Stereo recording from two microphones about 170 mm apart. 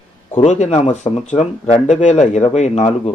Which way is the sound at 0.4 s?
45° left (ahead or behind).